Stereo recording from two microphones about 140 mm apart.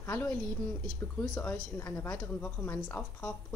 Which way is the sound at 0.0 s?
15° left (ahead or behind).